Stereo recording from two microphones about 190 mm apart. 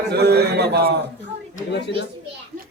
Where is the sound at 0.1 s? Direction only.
60° right (ahead or behind).